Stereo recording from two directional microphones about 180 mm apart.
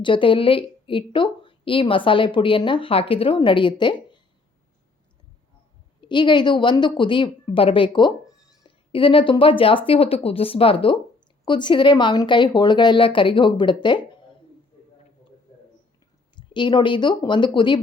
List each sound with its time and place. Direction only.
0.0 s a woman's voice: 30° left (ahead or behind)
6.0 s a woman's voice: 25° left (ahead or behind)
16.3 s a woman's voice: 25° left (ahead or behind)